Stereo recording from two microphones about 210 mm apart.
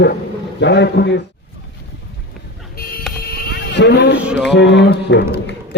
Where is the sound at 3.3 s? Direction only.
50° left (ahead or behind).